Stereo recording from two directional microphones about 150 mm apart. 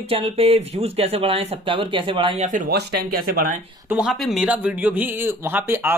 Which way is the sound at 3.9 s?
5° right (ahead or behind).